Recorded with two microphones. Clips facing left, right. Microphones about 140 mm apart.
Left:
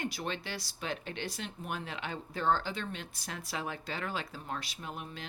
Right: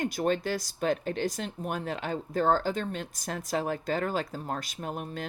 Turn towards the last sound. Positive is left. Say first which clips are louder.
# right 7 dB
turn(degrees=-45)  # may be behind; listen again after turning